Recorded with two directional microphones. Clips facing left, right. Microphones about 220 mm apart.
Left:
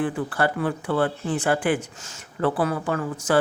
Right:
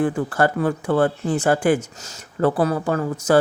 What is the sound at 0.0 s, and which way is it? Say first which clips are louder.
Speech: right 4 dB; 45° right (ahead or behind).